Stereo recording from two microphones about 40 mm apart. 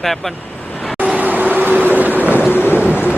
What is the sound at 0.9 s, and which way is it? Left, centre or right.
Vehicle, right.